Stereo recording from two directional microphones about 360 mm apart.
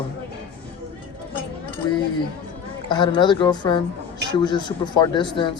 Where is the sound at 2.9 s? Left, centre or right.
Centre.